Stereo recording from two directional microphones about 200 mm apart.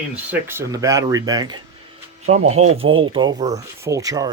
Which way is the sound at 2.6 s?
30° right (ahead or behind).